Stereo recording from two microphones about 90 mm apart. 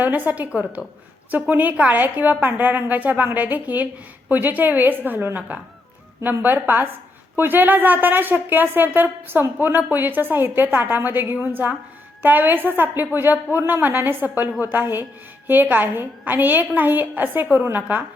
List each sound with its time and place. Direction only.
0.0 s a woman's voice: 20° right (ahead or behind)